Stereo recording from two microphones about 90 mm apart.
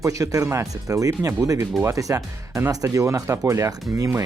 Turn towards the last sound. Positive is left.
turn(degrees=-35)  # may be behind; listen again after turning